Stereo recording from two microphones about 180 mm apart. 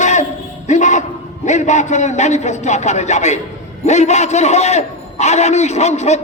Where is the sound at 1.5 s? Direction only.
40° left (ahead or behind).